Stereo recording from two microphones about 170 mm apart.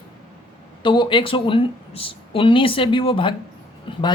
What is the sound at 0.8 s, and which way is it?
Speech, 30° left (ahead or behind).